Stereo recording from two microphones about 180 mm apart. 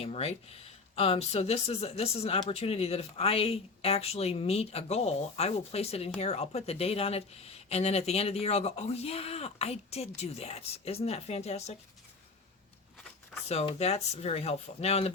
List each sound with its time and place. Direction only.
0.0 s speech: 35° left (ahead or behind)
13.5 s speech: 35° left (ahead or behind)